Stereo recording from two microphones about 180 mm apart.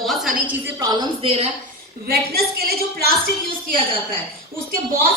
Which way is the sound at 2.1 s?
60° right (ahead or behind).